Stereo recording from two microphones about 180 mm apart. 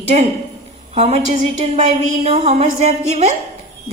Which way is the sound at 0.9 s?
35° right (ahead or behind).